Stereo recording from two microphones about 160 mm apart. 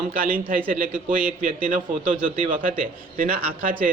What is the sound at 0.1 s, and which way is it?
Speech, 65° right (ahead or behind).